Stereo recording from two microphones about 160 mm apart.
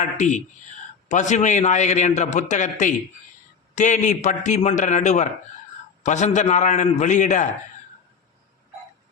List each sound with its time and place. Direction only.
0.0 s a man's voice: 50° left (ahead or behind)